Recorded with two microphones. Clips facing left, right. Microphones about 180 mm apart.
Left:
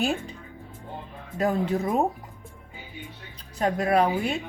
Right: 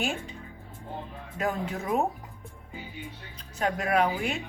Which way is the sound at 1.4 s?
35° left (ahead or behind).